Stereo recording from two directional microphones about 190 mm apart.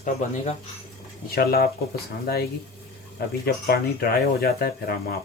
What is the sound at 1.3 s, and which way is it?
Speech, 55° left (ahead or behind).